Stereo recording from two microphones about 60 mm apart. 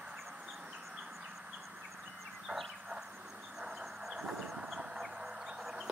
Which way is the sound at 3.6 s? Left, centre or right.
Centre.